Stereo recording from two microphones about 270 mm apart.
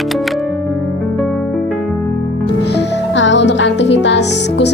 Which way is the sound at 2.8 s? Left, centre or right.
Left.